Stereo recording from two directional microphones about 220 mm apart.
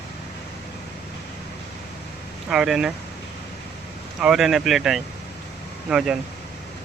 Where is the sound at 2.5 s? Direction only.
5° right (ahead or behind).